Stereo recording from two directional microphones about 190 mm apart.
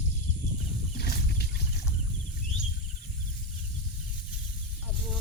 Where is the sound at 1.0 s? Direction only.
55° left (ahead or behind).